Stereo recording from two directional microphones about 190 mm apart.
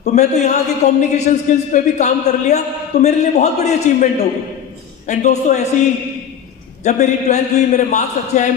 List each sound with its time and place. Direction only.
0.0 s a man's voice: 35° left (ahead or behind)
6.8 s a man's voice: 35° left (ahead or behind)